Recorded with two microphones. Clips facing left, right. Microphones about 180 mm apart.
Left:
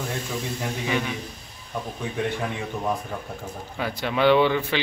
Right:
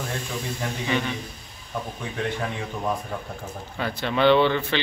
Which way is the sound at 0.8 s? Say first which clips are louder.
Right 1 dB; 5° left (ahead or behind).